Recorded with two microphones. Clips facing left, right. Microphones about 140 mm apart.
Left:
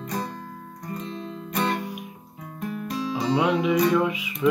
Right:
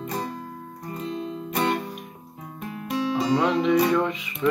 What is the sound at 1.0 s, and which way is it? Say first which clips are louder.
Music: right 7 dB; 35° right (ahead or behind).